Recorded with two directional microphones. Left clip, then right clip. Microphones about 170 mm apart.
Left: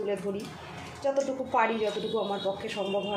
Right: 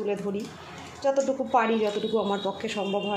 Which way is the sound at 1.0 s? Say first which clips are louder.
Right 4 dB; 45° right (ahead or behind).